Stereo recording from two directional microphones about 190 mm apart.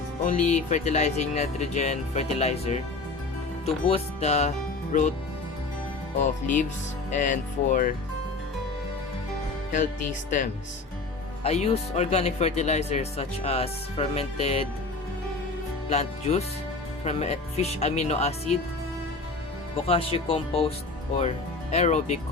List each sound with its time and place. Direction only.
0.3 s speech: 40° left (ahead or behind)
3.8 s speech: 35° left (ahead or behind)
6.1 s speech: 40° left (ahead or behind)
11.4 s speech: 35° left (ahead or behind)
15.9 s speech: 35° left (ahead or behind)
19.7 s speech: 30° left (ahead or behind)